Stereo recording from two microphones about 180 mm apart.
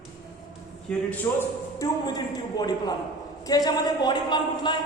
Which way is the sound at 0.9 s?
5° left (ahead or behind).